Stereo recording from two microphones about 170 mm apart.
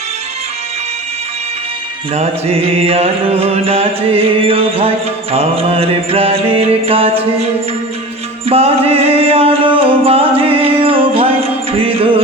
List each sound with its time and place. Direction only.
2.1 s music: 35° right (ahead or behind)
8.4 s music: 35° right (ahead or behind)